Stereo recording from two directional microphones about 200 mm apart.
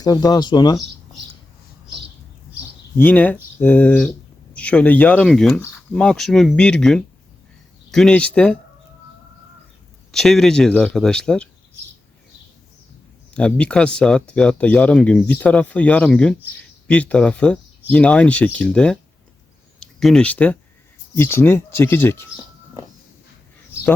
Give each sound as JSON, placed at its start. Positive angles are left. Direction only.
{"t": 0.0, "sound": "speech", "side_deg": 20}
{"t": 3.0, "sound": "speech", "side_deg": 10}
{"t": 10.1, "sound": "speech", "side_deg": 0}
{"t": 13.3, "sound": "speech", "side_deg": 5}